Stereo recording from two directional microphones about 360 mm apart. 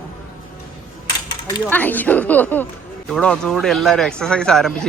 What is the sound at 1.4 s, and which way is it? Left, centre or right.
Speech, centre.